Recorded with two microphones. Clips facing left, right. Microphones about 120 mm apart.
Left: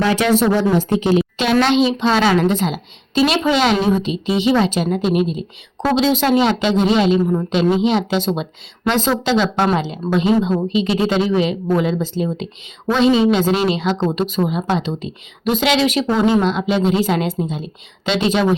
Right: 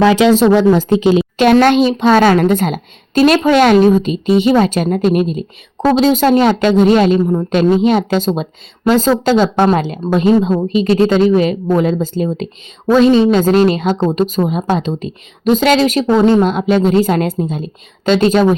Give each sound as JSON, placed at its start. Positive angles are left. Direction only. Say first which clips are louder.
{"t": 0.0, "sound": "speech", "louder": "right 6 dB", "side_deg": -90}
{"t": 1.4, "sound": "a woman's voice", "louder": "right 8 dB", "side_deg": -50}